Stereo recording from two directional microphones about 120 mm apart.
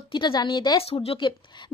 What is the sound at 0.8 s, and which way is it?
Speech, 55° left (ahead or behind).